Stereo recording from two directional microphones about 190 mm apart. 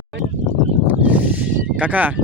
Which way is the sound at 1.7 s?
10° right (ahead or behind).